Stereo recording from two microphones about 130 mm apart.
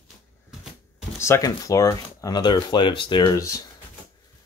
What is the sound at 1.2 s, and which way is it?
Speech, 25° left (ahead or behind).